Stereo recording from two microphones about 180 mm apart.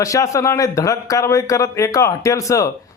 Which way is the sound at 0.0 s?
15° left (ahead or behind).